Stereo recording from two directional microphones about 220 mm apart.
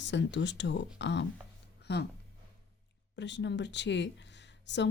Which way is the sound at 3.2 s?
55° left (ahead or behind).